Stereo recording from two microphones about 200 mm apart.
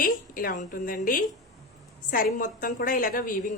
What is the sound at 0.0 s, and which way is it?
A woman's voice, 45° left (ahead or behind).